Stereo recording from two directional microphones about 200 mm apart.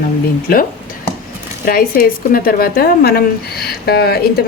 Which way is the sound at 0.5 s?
45° left (ahead or behind).